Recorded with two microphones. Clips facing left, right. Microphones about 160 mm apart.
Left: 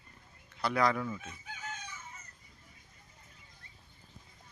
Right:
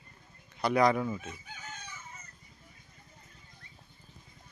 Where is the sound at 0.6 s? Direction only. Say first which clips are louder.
Right 4 dB; 20° right (ahead or behind).